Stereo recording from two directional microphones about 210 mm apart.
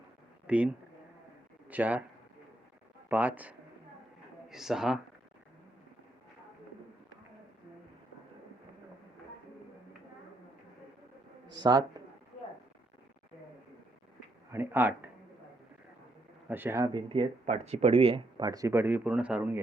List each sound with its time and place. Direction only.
0.4 s speech: 5° right (ahead or behind)
1.7 s speech: 5° right (ahead or behind)
3.1 s speech: 10° right (ahead or behind)
11.4 s a man's voice: 20° right (ahead or behind)
14.5 s speech: 10° right (ahead or behind)
16.5 s speech: 10° right (ahead or behind)